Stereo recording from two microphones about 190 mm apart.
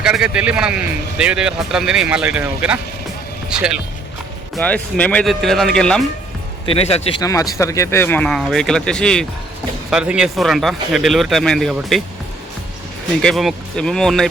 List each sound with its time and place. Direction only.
0.0 s a man's voice: 5° right (ahead or behind)
4.5 s a man's voice: 5° left (ahead or behind)
6.7 s speech: 30° left (ahead or behind)
7.2 s a man's voice: 15° left (ahead or behind); by 12.0 s centre (ahead or behind)
13.2 s a man's voice: centre (ahead or behind)